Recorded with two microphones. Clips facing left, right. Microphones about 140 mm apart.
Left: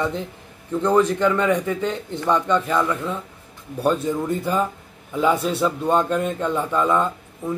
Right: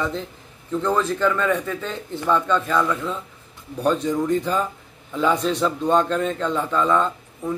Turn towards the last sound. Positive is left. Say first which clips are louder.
# even
turn(degrees=10)  # may be behind; listen again after turning